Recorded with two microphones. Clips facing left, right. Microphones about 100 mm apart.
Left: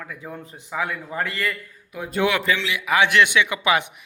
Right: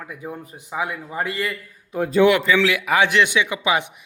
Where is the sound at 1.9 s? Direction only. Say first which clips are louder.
Right 7 dB; 35° right (ahead or behind).